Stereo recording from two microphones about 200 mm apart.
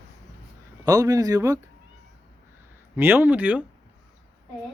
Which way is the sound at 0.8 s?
15° right (ahead or behind).